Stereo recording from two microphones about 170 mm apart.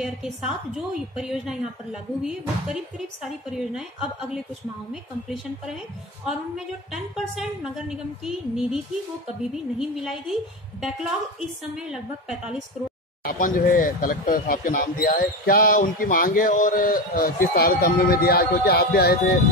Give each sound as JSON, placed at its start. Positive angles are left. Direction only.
{"t": 0.0, "sound": "a woman's voice", "side_deg": 0}
{"t": 6.9, "sound": "a woman's voice", "side_deg": 0}
{"t": 13.2, "sound": "speech", "side_deg": 55}